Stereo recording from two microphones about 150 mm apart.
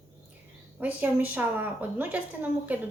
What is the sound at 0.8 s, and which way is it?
A woman's voice, 10° right (ahead or behind).